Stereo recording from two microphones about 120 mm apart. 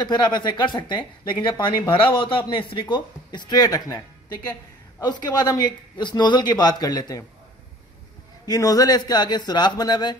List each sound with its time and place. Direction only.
0.0 s speech: 40° left (ahead or behind)
5.0 s speech: 35° left (ahead or behind)
8.5 s speech: 30° left (ahead or behind)